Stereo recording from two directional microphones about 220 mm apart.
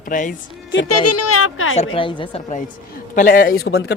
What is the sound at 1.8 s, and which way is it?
Speech, 25° left (ahead or behind).